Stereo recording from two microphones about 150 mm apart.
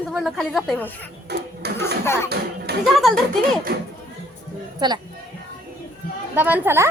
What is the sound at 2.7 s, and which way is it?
Music, 90° right.